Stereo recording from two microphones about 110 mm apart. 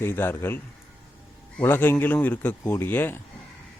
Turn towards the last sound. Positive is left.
turn(degrees=20)  # may be behind; listen again after turning